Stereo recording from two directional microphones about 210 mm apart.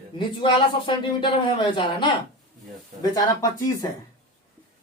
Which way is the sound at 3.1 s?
15° left (ahead or behind).